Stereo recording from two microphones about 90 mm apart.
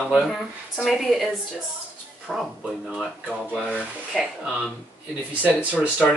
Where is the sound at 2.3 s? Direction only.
5° left (ahead or behind).